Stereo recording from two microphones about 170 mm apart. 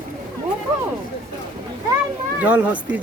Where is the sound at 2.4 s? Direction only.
10° right (ahead or behind).